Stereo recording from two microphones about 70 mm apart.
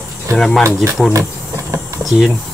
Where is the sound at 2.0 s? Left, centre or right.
Centre.